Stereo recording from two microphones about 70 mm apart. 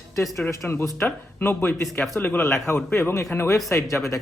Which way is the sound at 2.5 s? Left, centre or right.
Left.